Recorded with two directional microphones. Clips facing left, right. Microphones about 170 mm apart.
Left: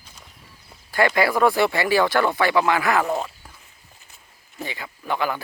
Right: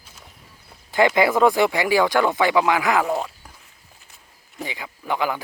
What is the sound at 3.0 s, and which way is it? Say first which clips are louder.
Speech: right 1 dB; centre (ahead or behind).